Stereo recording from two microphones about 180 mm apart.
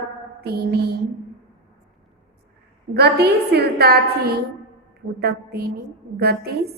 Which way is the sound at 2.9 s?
65° right (ahead or behind).